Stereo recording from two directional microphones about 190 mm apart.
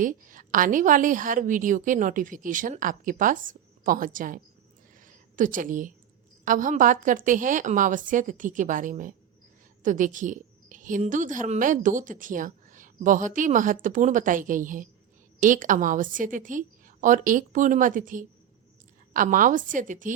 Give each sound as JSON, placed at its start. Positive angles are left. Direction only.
{"t": 0.0, "sound": "a woman's voice", "side_deg": -45}
{"t": 4.9, "sound": "a sound", "side_deg": -45}
{"t": 6.4, "sound": "a woman's voice", "side_deg": -45}